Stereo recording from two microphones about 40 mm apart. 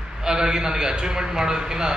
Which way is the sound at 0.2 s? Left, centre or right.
Centre.